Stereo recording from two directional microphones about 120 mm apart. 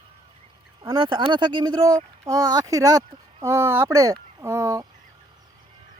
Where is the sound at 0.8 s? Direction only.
35° right (ahead or behind).